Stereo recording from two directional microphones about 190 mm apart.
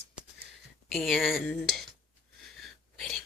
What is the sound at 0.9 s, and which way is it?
Speech, centre (ahead or behind).